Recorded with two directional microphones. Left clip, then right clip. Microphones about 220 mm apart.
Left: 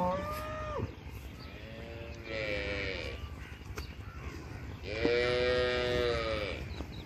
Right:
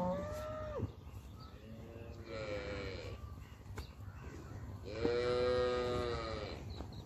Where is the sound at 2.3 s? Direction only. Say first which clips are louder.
Left 7 dB; 55° right (ahead or behind).